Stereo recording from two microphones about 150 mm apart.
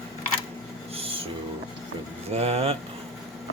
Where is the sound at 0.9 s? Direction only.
40° right (ahead or behind).